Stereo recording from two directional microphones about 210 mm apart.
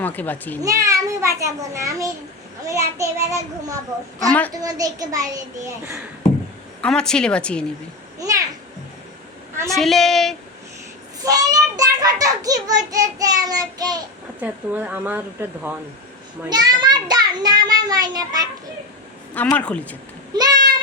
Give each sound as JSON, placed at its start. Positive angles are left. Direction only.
{"t": 0.0, "sound": "a child's voice", "side_deg": 10}
{"t": 0.6, "sound": "a child's voice", "side_deg": -15}
{"t": 4.3, "sound": "speech", "side_deg": 5}
{"t": 4.5, "sound": "a child's voice", "side_deg": -15}
{"t": 6.8, "sound": "a woman's voice", "side_deg": 5}
{"t": 8.2, "sound": "a child's voice", "side_deg": -15}
{"t": 9.7, "sound": "a woman's voice", "side_deg": 0}
{"t": 11.3, "sound": "a child's voice", "side_deg": -15}
{"t": 14.4, "sound": "a child's voice", "side_deg": -10}
{"t": 16.5, "sound": "a child's voice", "side_deg": -20}
{"t": 19.5, "sound": "speech", "side_deg": 5}
{"t": 20.3, "sound": "a sound", "side_deg": -20}